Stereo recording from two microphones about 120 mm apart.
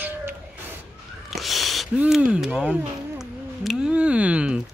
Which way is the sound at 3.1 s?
Centre (ahead or behind).